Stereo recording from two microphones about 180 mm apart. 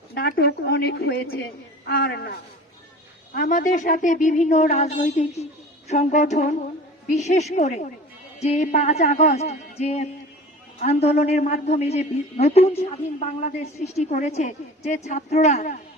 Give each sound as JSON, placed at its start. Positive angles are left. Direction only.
{"t": 0.1, "sound": "a woman's voice", "side_deg": 60}
{"t": 3.3, "sound": "a woman's voice", "side_deg": 45}